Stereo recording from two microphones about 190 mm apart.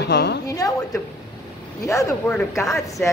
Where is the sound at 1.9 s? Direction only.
15° left (ahead or behind).